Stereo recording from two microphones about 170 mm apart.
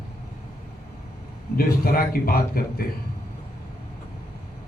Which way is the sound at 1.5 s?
60° left (ahead or behind).